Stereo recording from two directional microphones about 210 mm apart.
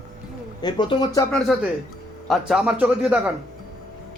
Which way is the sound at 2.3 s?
5° right (ahead or behind).